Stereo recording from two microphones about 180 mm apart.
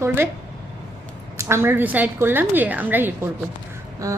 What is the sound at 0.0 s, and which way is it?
Speech, 15° right (ahead or behind).